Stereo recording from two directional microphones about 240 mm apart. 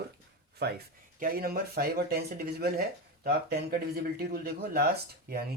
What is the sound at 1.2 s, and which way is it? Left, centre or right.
Speech, right.